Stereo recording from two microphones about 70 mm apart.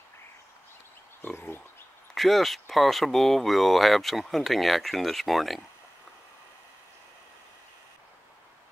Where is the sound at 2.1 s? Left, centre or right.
Centre.